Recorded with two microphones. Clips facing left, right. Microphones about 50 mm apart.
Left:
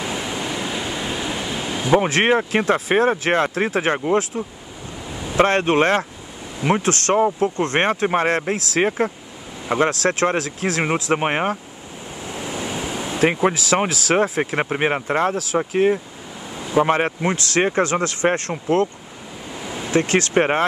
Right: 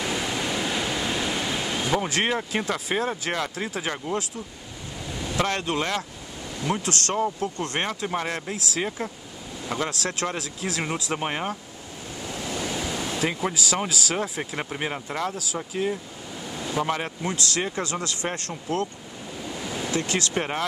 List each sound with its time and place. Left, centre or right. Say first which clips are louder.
0.0 s waves: left 2 dB; centre
2.0 s speech: left 11 dB; left
5.3 s speech: left 9 dB; left
12.3 s waves: left 3 dB; left
13.2 s speech: left 10 dB; left
19.9 s speech: left 9 dB; left